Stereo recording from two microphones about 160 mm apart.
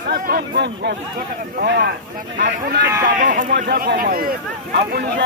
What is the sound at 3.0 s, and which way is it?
Speech, 50° right (ahead or behind).